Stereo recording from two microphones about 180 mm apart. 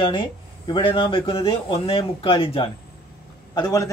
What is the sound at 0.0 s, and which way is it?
Speech, 30° left (ahead or behind).